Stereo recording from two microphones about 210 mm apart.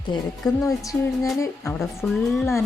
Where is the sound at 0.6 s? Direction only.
15° left (ahead or behind).